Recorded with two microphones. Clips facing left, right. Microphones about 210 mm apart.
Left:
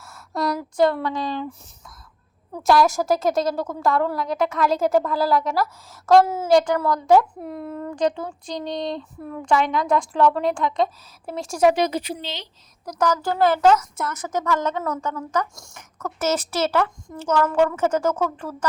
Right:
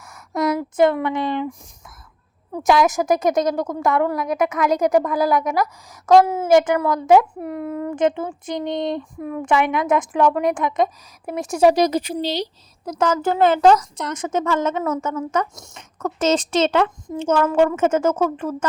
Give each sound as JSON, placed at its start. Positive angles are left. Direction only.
{"t": 0.0, "sound": "a sound", "side_deg": -15}
{"t": 0.8, "sound": "speech", "side_deg": -20}
{"t": 2.6, "sound": "a woman's voice", "side_deg": -20}
{"t": 4.3, "sound": "a woman's voice", "side_deg": 0}
{"t": 4.7, "sound": "a woman's voice", "side_deg": -15}
{"t": 7.3, "sound": "a woman's voice", "side_deg": -10}
{"t": 7.9, "sound": "speech", "side_deg": -20}
{"t": 11.7, "sound": "speech", "side_deg": -40}
{"t": 12.8, "sound": "speech", "side_deg": -25}